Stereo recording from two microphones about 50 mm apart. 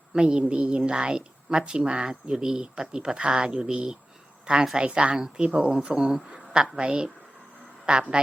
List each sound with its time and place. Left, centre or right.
0.1 s speech: centre
6.3 s a sound: centre
6.7 s speech: centre